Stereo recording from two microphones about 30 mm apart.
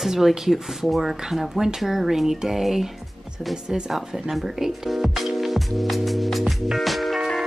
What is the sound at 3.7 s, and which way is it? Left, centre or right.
Speech, right.